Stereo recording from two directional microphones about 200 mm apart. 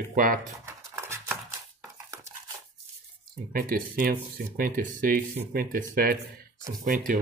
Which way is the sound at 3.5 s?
45° right (ahead or behind).